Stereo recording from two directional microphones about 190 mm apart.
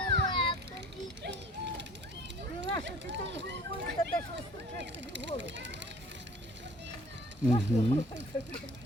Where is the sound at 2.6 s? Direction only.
65° right (ahead or behind).